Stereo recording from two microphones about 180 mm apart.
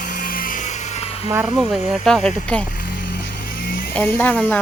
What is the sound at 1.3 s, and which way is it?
Speech, 15° right (ahead or behind).